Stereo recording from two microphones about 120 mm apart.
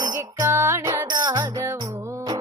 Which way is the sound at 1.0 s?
35° right (ahead or behind).